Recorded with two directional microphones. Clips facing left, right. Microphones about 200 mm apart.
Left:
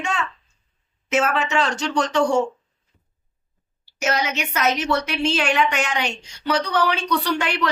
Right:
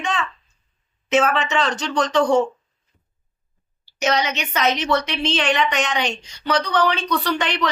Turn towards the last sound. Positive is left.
turn(degrees=10)  # may be behind; listen again after turning